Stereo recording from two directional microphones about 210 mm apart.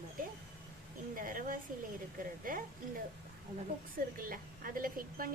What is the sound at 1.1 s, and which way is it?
A woman's voice, 40° right (ahead or behind).